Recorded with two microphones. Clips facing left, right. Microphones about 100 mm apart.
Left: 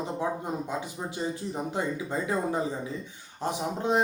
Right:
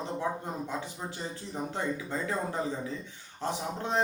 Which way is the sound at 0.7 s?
15° left (ahead or behind).